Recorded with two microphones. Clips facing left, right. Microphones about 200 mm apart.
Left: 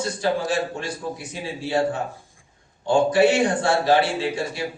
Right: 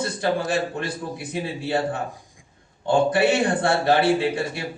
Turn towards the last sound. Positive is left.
turn(degrees=-55)  # may be behind; listen again after turning